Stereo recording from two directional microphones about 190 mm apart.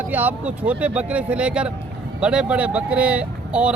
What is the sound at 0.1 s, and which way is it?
Speech, 10° right (ahead or behind).